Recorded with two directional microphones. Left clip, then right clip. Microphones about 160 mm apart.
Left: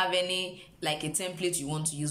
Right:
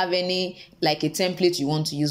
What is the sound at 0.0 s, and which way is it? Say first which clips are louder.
Speech: right 4 dB; 35° right (ahead or behind).